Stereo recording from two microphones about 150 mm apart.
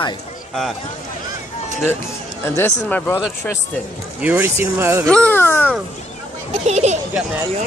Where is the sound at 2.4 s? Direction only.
15° left (ahead or behind).